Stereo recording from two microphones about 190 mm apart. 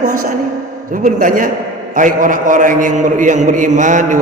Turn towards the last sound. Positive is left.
turn(degrees=-40)  # may be behind; listen again after turning